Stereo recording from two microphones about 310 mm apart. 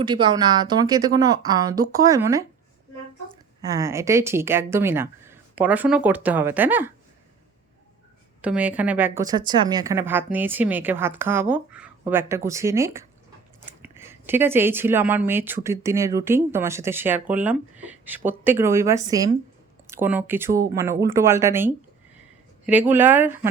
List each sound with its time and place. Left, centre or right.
0.0 s speech: centre
3.6 s speech: centre
8.4 s speech: centre